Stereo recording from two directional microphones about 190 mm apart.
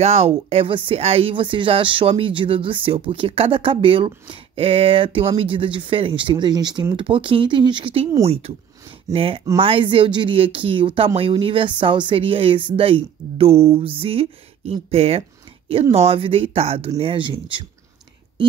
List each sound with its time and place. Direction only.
0.0 s speech: 35° right (ahead or behind)